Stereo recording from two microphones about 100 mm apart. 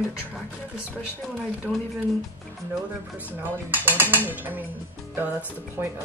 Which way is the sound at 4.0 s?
20° right (ahead or behind).